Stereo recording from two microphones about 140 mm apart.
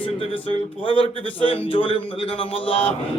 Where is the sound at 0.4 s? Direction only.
40° left (ahead or behind).